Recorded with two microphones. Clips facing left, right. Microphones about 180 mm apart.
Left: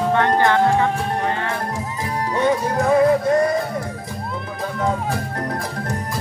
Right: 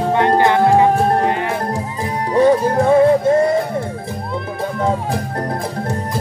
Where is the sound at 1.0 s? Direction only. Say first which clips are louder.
Right 8 dB; 35° right (ahead or behind).